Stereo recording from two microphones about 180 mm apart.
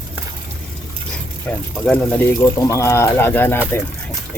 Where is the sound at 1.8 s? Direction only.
10° left (ahead or behind).